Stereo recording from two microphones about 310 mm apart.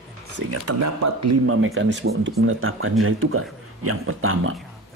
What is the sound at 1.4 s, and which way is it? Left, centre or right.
Speech, right.